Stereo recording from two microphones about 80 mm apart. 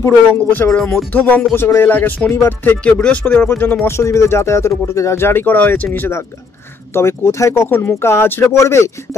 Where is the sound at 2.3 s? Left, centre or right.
Left.